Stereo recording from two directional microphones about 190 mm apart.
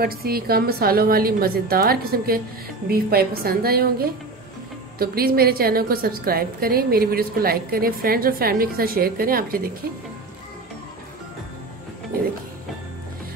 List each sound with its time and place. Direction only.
0.0 s a woman's voice: 55° right (ahead or behind)
4.9 s a woman's voice: 50° right (ahead or behind)